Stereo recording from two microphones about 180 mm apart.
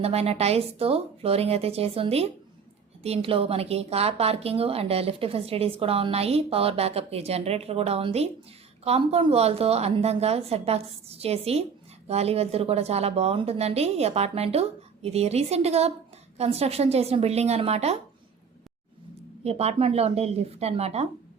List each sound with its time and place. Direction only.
0.0 s a woman's voice: 35° right (ahead or behind)
19.5 s a woman's voice: 35° right (ahead or behind)